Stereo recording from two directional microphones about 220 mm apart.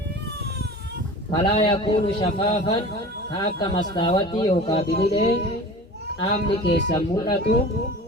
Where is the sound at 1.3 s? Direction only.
20° left (ahead or behind).